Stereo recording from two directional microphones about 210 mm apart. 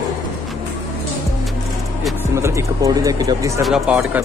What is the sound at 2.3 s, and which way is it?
Speech, 15° right (ahead or behind).